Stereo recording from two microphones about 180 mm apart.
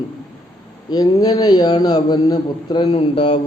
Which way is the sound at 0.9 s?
20° left (ahead or behind).